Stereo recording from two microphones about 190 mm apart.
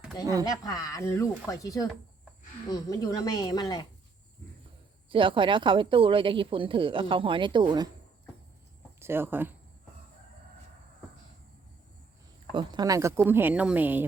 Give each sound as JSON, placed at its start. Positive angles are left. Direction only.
{"t": 0.5, "sound": "speech", "side_deg": 20}
{"t": 5.0, "sound": "a woman's voice", "side_deg": -25}
{"t": 9.0, "sound": "speech", "side_deg": -10}
{"t": 12.5, "sound": "speech", "side_deg": -20}